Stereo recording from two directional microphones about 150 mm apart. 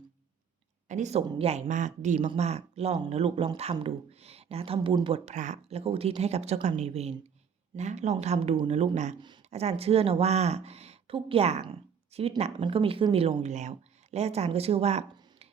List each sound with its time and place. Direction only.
0.9 s a woman's voice: 50° right (ahead or behind)